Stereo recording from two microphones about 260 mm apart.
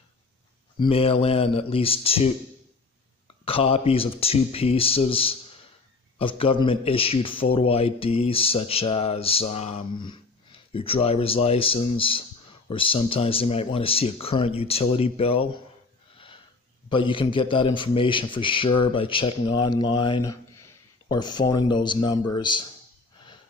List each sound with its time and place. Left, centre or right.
0.7 s speech: left
3.4 s speech: left
16.9 s speech: centre